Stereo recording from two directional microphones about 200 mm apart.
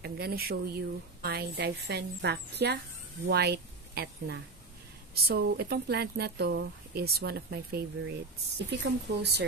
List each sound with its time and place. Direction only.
0.0 s speech: 50° right (ahead or behind)